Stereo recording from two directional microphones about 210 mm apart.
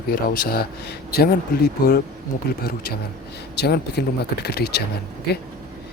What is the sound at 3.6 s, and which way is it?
Speech, 50° left (ahead or behind).